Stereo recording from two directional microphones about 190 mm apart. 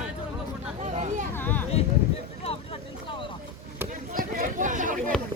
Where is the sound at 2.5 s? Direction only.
30° left (ahead or behind).